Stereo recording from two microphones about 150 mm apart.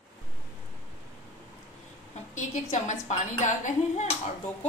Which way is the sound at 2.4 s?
55° left (ahead or behind).